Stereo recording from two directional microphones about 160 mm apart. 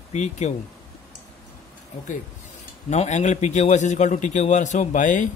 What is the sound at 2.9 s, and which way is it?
A man's voice, 45° left (ahead or behind).